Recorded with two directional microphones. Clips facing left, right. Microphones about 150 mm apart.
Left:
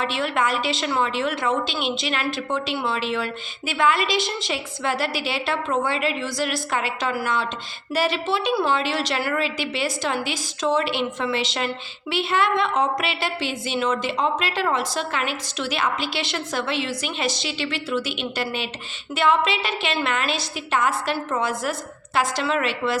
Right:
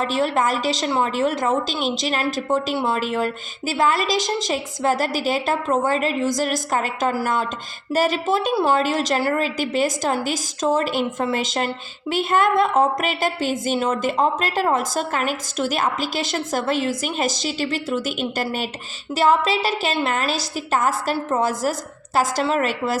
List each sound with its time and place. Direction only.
0.0 s a woman's voice: 40° right (ahead or behind)